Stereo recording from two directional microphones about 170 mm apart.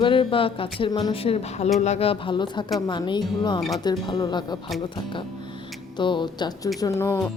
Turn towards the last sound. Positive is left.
turn(degrees=15)  # may be behind; listen again after turning